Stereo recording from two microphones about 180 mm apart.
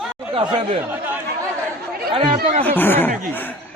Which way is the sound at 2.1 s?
30° right (ahead or behind).